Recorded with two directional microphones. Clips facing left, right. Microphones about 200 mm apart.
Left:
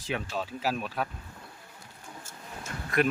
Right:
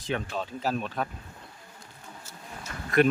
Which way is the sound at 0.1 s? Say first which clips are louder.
Right 2 dB; 5° left (ahead or behind).